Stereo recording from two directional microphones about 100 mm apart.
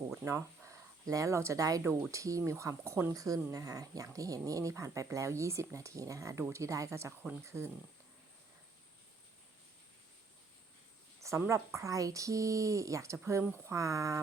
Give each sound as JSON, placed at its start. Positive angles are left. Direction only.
{"t": 0.3, "sound": "speech", "side_deg": -30}
{"t": 11.2, "sound": "speech", "side_deg": -30}